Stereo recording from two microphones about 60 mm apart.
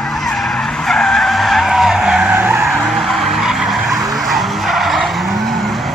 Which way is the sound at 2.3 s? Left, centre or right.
Right.